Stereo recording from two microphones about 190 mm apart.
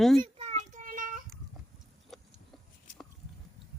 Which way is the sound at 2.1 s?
Centre (ahead or behind).